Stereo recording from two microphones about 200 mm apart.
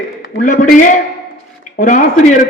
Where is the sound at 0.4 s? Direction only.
40° left (ahead or behind).